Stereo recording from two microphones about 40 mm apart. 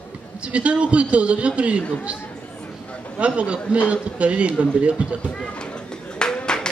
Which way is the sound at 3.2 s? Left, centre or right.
Right.